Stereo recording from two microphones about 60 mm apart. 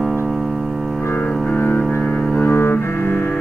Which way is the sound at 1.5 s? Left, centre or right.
Left.